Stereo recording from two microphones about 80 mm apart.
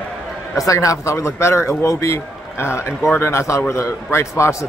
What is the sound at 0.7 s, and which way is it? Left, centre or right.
A man's voice, left.